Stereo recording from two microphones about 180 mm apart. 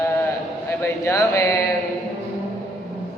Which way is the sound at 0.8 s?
15° left (ahead or behind).